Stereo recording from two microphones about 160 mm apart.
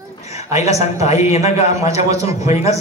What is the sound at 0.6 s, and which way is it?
Speech, 20° right (ahead or behind).